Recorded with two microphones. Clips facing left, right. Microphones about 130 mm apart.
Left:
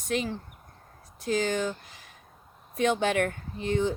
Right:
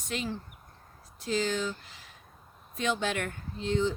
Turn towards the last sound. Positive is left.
turn(degrees=60)  # may be behind; listen again after turning